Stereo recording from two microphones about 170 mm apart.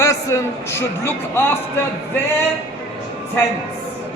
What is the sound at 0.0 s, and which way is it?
A man's voice, 20° left (ahead or behind).